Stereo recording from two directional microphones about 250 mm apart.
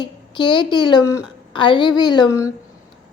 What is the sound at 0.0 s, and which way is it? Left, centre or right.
A woman's voice, centre.